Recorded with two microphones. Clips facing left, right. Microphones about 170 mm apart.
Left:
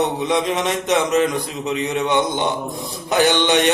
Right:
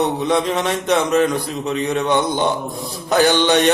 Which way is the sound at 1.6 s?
20° left (ahead or behind).